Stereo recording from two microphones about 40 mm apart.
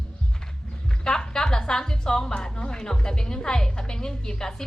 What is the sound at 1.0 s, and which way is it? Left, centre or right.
A woman's voice, centre.